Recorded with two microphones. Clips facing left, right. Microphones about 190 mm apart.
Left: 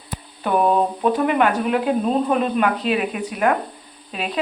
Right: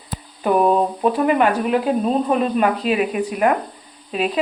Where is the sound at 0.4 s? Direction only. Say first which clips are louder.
Right 2 dB; 5° right (ahead or behind).